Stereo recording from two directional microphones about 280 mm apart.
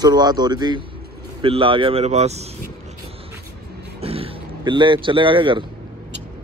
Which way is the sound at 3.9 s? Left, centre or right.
Right.